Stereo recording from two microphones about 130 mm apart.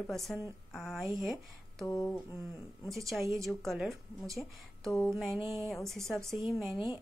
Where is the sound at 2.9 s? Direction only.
Centre (ahead or behind).